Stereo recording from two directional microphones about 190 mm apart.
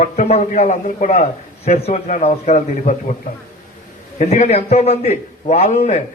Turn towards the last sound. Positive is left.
turn(degrees=35)  # may be behind; listen again after turning